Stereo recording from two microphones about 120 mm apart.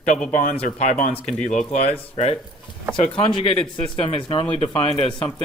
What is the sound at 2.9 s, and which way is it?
Speech, 45° left (ahead or behind).